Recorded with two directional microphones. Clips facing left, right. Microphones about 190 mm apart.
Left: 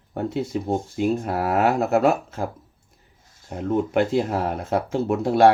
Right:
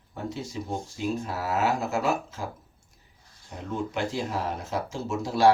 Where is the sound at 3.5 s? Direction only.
60° left (ahead or behind).